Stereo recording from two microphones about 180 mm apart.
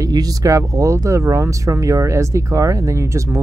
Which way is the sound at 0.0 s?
20° right (ahead or behind).